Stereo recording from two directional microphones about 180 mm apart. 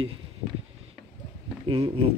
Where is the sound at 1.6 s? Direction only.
30° right (ahead or behind).